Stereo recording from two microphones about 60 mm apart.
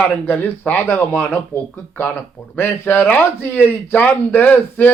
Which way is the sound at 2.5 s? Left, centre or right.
Left.